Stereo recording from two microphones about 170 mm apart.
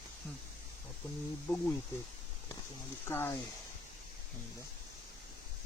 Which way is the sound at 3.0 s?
15° left (ahead or behind).